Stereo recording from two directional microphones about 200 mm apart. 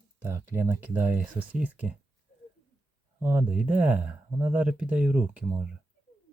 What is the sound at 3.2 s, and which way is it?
Speech, 10° right (ahead or behind).